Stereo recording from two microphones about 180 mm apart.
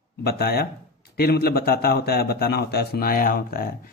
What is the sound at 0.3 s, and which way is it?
Speech, 60° left (ahead or behind).